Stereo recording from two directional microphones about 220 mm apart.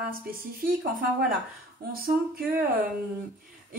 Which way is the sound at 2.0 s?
40° right (ahead or behind).